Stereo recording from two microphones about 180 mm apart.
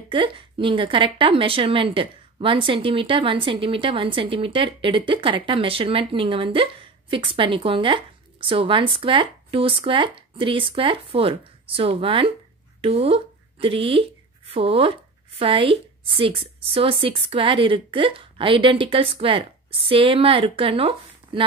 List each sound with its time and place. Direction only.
0.1 s a woman's voice: 30° right (ahead or behind)